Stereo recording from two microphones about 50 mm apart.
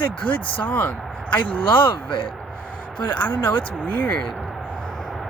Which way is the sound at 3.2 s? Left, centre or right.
Left.